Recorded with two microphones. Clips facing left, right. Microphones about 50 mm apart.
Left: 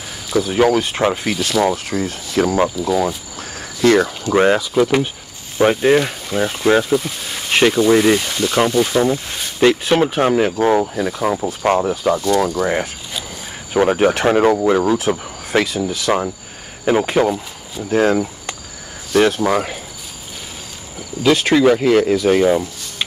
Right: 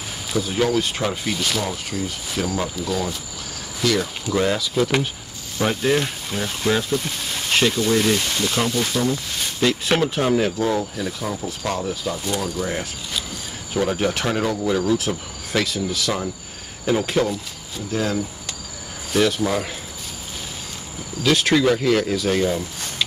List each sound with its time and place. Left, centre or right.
0.4 s speech: left
4.7 s speech: centre
5.6 s speech: left
17.8 s speech: left
21.3 s speech: centre